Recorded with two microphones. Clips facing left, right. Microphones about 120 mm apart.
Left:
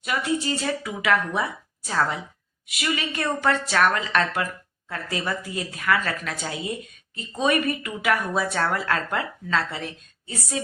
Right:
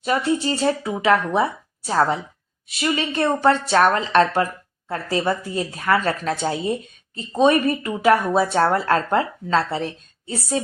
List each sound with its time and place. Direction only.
0.0 s speech: 30° right (ahead or behind)